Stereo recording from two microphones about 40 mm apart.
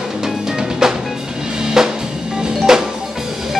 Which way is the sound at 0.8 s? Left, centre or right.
Centre.